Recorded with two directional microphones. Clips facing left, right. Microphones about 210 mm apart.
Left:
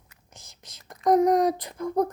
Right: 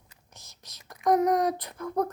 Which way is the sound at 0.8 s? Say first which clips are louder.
Left 3 dB; 25° left (ahead or behind).